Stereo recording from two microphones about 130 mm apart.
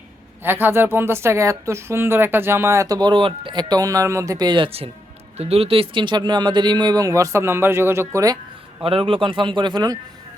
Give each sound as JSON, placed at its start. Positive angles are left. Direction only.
{"t": 0.4, "sound": "speech", "side_deg": -15}
{"t": 8.8, "sound": "speech", "side_deg": -45}